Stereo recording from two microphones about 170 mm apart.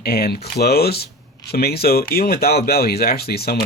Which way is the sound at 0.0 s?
65° left (ahead or behind).